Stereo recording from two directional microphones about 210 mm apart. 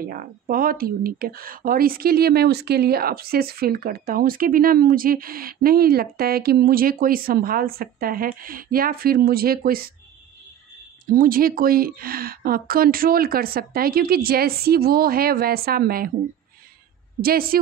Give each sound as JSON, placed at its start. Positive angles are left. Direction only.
{"t": 0.1, "sound": "speech", "side_deg": -40}
{"t": 11.1, "sound": "speech", "side_deg": -40}
{"t": 17.2, "sound": "speech", "side_deg": -45}